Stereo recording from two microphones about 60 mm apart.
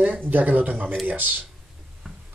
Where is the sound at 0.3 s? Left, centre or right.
Right.